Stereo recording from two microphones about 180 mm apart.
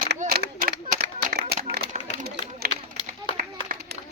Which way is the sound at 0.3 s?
60° right (ahead or behind).